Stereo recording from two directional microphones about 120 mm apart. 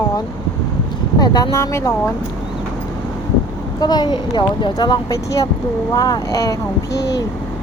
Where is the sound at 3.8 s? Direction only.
35° left (ahead or behind).